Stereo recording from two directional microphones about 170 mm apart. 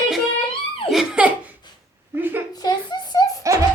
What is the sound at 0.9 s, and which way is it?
Laughter, 5° right (ahead or behind).